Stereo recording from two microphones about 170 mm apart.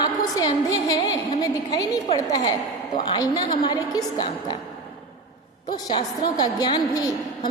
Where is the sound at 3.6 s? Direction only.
25° left (ahead or behind).